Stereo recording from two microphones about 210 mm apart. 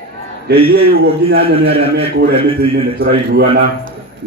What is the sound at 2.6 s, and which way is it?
Speech, 45° right (ahead or behind).